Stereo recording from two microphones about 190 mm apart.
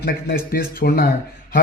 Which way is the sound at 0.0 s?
55° left (ahead or behind).